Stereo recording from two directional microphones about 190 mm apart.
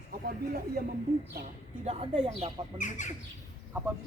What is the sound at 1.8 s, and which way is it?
A woman's voice, 35° right (ahead or behind).